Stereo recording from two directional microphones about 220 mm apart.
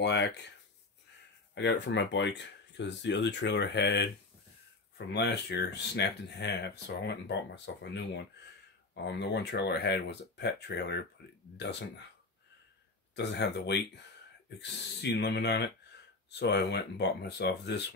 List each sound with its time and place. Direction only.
0.0 s speech: 50° left (ahead or behind)
1.5 s speech: 50° left (ahead or behind)
13.1 s speech: 50° left (ahead or behind)